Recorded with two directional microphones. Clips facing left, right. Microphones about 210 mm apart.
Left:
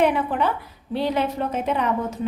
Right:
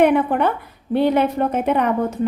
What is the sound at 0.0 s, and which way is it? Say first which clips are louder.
A woman's voice: right 5 dB; 55° right (ahead or behind).